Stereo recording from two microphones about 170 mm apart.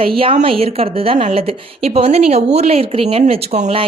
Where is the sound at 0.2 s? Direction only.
35° right (ahead or behind).